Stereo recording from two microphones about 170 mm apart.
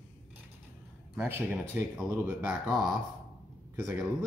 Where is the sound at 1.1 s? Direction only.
10° right (ahead or behind).